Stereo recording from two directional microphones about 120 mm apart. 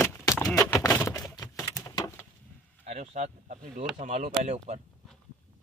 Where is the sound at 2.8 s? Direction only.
65° right (ahead or behind).